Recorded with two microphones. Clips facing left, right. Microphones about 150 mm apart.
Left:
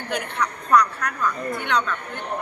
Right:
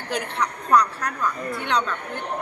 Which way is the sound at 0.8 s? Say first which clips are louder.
Left 1 dB; 30° right (ahead or behind).